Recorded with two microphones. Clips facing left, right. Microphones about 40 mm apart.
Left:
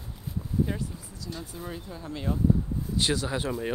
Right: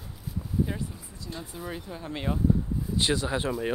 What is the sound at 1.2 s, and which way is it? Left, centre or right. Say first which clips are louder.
Speech: even; right.